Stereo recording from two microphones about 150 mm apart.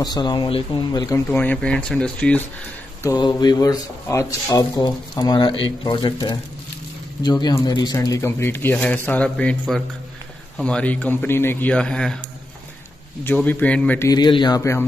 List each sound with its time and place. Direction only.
0.0 s speech: 30° left (ahead or behind)
1.0 s speech: 15° left (ahead or behind)
3.0 s speech: 25° left (ahead or behind); by 12.2 s 5° left (ahead or behind)
13.2 s speech: 10° left (ahead or behind)
14.0 s speech: 30° left (ahead or behind)